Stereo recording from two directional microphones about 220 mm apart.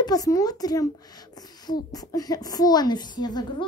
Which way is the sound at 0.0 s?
15° left (ahead or behind).